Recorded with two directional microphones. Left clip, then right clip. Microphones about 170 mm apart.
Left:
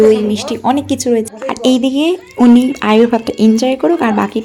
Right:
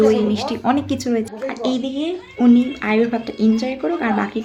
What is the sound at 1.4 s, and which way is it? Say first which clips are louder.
Speech: left 9 dB; 40° left (ahead or behind).